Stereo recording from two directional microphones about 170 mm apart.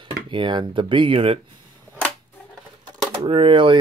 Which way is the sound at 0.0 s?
30° right (ahead or behind).